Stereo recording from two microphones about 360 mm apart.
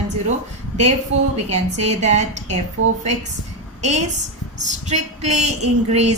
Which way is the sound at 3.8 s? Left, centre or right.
Centre.